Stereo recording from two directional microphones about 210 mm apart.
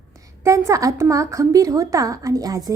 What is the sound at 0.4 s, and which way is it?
A woman's voice, 15° right (ahead or behind).